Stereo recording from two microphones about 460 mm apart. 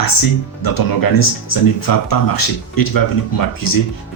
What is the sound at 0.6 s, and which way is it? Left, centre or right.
Speech, left.